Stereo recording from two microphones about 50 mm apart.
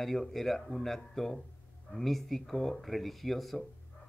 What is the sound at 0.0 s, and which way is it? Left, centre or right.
Speech, centre.